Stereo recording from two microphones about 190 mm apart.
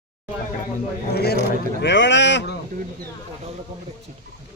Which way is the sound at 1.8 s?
70° left (ahead or behind).